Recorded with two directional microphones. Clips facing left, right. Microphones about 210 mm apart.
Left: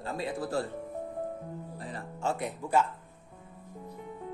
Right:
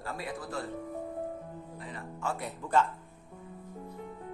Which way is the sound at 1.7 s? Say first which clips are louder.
Left 2 dB; 35° left (ahead or behind).